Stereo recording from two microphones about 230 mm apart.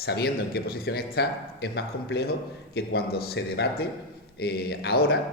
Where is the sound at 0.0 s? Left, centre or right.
Left.